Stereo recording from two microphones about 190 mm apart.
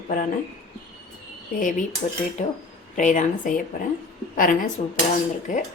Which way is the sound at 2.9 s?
40° left (ahead or behind).